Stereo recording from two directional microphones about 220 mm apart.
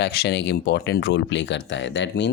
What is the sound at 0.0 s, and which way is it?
Speech, 50° left (ahead or behind).